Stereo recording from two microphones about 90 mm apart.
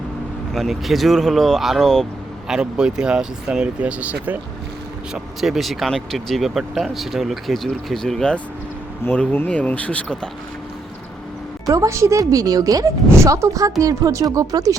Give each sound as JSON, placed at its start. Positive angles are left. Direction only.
{"t": 0.5, "sound": "speech", "side_deg": 0}
{"t": 2.5, "sound": "speech", "side_deg": -10}
{"t": 5.1, "sound": "speech", "side_deg": -5}
{"t": 11.7, "sound": "speech", "side_deg": -35}